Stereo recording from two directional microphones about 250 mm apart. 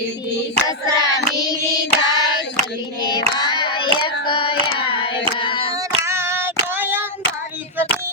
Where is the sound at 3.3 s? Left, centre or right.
Centre.